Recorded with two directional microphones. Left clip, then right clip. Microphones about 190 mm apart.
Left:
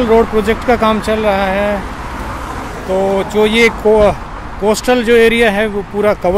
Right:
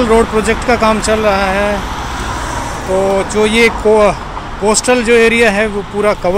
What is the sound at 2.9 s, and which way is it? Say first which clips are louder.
Speech: right 1 dB; 15° left (ahead or behind).